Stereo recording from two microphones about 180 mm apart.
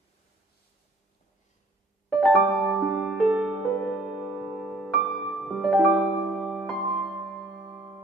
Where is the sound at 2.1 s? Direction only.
Centre (ahead or behind).